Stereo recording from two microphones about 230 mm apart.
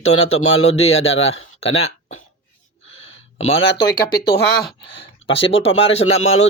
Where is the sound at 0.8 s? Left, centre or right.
Left.